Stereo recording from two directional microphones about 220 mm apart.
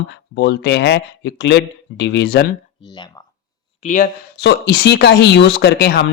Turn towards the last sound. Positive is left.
turn(degrees=45)  # may be behind; listen again after turning